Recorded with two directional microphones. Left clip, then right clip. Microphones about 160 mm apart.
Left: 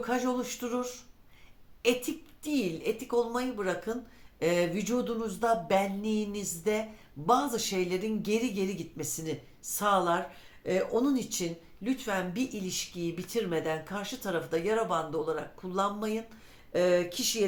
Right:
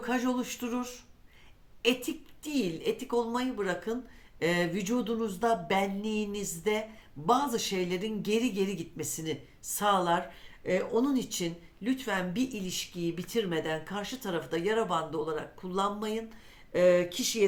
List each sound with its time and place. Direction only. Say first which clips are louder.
0.0 s speech: left 1 dB; 45° right (ahead or behind)